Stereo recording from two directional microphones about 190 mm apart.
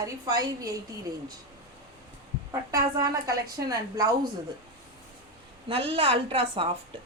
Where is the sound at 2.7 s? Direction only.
15° right (ahead or behind).